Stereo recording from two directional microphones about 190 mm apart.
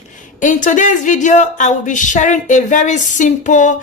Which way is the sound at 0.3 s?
40° left (ahead or behind).